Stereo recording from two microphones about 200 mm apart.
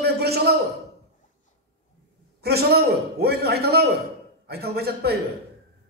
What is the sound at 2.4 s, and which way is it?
A man's voice, 55° right (ahead or behind).